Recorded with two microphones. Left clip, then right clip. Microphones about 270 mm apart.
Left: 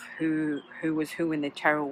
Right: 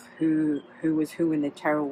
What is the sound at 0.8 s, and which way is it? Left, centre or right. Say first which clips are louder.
Speech: right 3 dB; centre.